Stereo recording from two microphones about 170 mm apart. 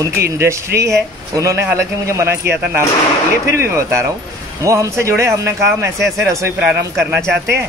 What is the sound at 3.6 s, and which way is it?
Speech, 15° right (ahead or behind).